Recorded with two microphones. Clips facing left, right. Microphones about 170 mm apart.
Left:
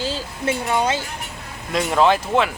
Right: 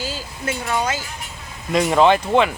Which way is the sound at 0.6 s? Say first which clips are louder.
Left 1 dB; 25° left (ahead or behind).